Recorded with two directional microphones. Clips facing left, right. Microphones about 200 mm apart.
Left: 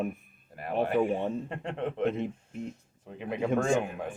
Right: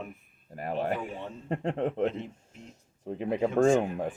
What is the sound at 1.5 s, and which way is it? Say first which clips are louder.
Speech: right 4 dB; 40° right (ahead or behind).